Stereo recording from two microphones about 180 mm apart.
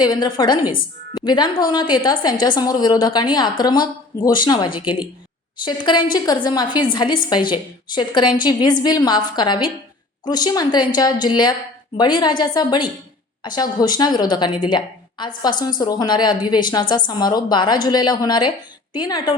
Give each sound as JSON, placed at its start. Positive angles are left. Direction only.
{"t": 0.0, "sound": "a woman's voice", "side_deg": 25}